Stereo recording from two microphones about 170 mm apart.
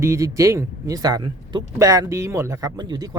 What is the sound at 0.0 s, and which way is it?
Speech, 15° right (ahead or behind).